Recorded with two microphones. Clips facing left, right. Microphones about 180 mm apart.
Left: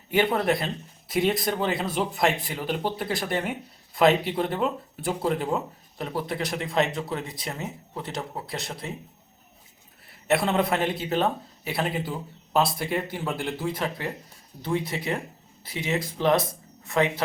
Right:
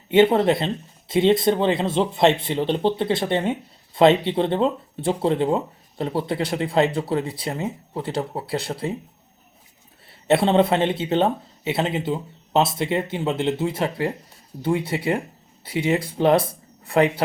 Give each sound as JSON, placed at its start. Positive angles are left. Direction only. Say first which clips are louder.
{"t": 0.1, "sound": "speech", "louder": "right 7 dB", "side_deg": -25}
{"t": 10.1, "sound": "speech", "louder": "right 6 dB", "side_deg": -25}